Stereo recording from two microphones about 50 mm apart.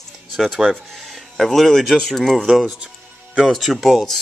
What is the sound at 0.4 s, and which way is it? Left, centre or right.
Speech, centre.